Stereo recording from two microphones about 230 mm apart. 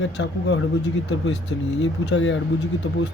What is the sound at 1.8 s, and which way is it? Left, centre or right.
Speech, left.